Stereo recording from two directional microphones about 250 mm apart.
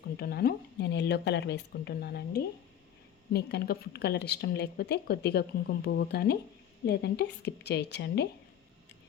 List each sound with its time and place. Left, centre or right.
0.2 s a woman's voice: left